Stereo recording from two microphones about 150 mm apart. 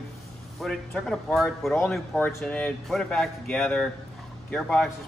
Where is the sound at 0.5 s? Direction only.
Centre (ahead or behind).